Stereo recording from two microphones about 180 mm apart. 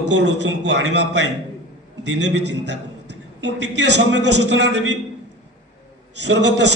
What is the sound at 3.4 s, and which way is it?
A man's voice, 80° right.